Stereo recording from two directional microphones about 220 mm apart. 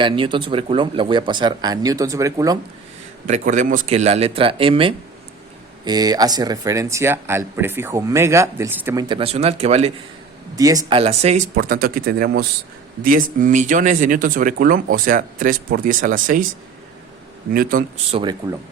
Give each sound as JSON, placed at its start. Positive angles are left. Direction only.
{"t": 0.0, "sound": "speech", "side_deg": -20}
{"t": 3.2, "sound": "speech", "side_deg": -35}
{"t": 10.5, "sound": "speech", "side_deg": -15}
{"t": 17.5, "sound": "speech", "side_deg": -40}
{"t": 18.1, "sound": "speech", "side_deg": -20}